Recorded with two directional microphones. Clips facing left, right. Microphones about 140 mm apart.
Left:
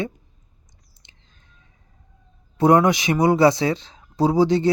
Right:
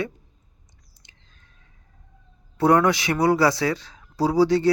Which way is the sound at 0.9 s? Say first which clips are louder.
Even; 25° left (ahead or behind).